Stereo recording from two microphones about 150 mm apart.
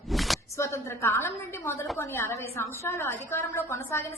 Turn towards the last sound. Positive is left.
turn(degrees=15)  # may be behind; listen again after turning